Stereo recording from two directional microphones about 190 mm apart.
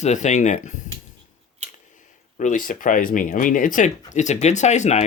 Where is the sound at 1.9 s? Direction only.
40° left (ahead or behind).